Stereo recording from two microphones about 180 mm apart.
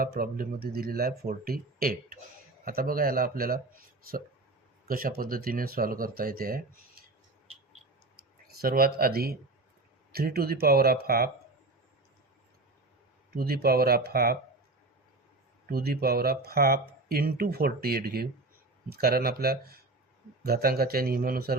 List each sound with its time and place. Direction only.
0.0 s speech: 55° right (ahead or behind)
8.6 s speech: 55° right (ahead or behind)
13.3 s speech: 55° right (ahead or behind)
15.7 s speech: 60° right (ahead or behind)